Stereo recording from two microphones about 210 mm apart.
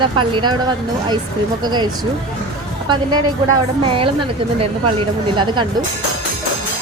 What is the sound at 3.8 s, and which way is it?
Speech, 25° right (ahead or behind).